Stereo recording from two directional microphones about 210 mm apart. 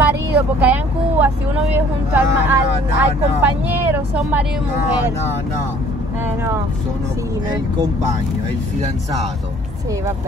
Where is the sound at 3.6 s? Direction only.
10° right (ahead or behind).